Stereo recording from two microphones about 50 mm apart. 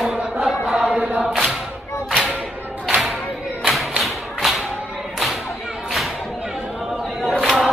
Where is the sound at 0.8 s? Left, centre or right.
Right.